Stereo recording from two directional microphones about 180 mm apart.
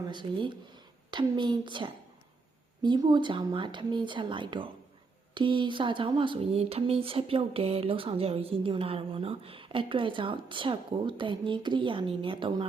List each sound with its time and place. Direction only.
0.1 s speech: 25° right (ahead or behind)